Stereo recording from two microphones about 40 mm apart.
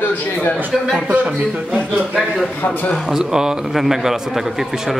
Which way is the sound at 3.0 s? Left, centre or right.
Centre.